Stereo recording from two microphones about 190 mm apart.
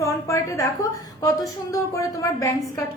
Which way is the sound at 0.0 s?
15° left (ahead or behind).